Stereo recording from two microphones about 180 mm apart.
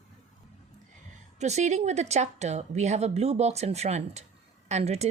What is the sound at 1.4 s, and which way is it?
A woman's voice, 40° right (ahead or behind).